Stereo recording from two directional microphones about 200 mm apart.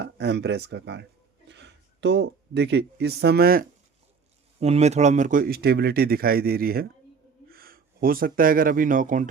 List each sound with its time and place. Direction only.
0.0 s speech: 55° right (ahead or behind)
4.6 s speech: 35° right (ahead or behind)